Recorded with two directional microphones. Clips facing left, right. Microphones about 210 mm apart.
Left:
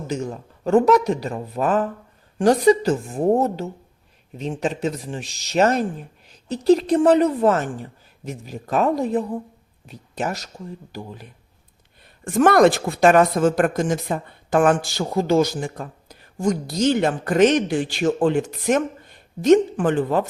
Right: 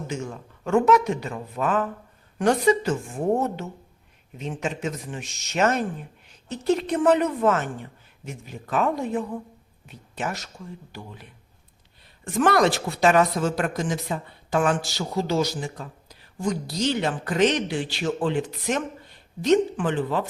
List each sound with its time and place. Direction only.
0.1 s a woman's voice: 35° left (ahead or behind)